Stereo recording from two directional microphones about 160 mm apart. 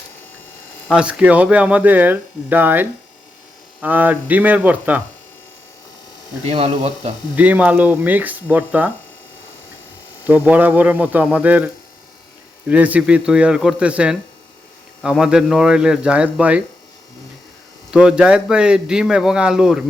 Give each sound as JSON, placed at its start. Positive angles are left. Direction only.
{"t": 0.9, "sound": "speech", "side_deg": -5}
{"t": 6.4, "sound": "speech", "side_deg": -40}
{"t": 7.3, "sound": "speech", "side_deg": -10}
{"t": 10.2, "sound": "a man's voice", "side_deg": -10}
{"t": 17.9, "sound": "a man's voice", "side_deg": -5}